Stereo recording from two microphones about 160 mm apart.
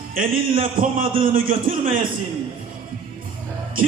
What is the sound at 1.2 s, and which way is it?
Speech, 60° right (ahead or behind).